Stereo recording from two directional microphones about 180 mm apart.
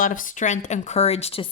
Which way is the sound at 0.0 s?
45° left (ahead or behind).